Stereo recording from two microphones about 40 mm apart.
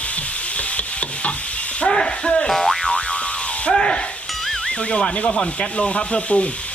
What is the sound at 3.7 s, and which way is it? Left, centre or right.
Music, left.